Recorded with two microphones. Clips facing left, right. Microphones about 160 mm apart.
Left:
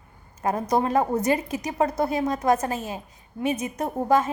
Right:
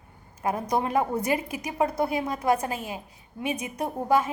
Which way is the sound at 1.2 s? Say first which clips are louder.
Left 3 dB; 10° right (ahead or behind).